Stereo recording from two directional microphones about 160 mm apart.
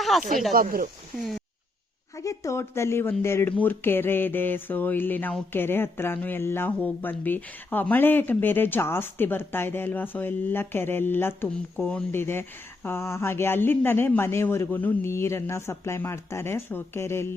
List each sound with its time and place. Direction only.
0.0 s snake: centre (ahead or behind)
0.5 s speech: 65° right (ahead or behind)
2.1 s speech: 20° left (ahead or behind)